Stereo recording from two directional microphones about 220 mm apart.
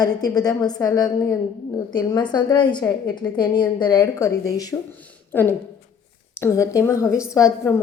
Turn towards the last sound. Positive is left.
turn(degrees=15)  # may be behind; listen again after turning